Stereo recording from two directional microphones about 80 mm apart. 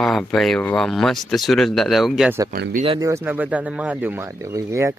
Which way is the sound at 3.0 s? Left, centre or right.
Right.